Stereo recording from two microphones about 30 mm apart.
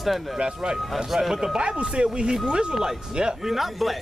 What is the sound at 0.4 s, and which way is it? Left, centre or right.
Speech, right.